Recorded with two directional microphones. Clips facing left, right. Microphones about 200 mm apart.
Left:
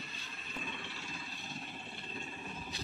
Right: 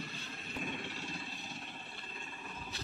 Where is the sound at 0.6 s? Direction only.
50° right (ahead or behind).